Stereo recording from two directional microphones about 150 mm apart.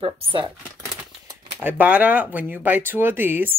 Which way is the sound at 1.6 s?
10° right (ahead or behind).